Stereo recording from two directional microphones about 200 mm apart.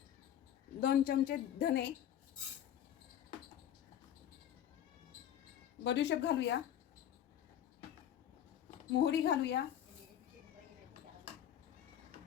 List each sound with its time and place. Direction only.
0.8 s a woman's voice: 45° left (ahead or behind)
5.8 s speech: 60° left (ahead or behind)
9.0 s speech: 55° left (ahead or behind)